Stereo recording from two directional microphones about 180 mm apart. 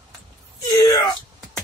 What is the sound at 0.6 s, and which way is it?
Speech, 20° left (ahead or behind).